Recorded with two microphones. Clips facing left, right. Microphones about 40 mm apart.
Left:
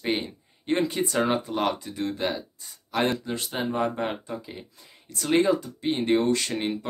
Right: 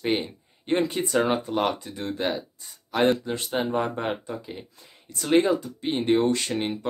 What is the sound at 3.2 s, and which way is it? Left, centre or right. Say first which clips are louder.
Speech: right 1 dB; right.